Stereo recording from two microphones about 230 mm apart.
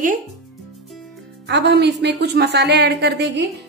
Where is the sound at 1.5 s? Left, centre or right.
Right.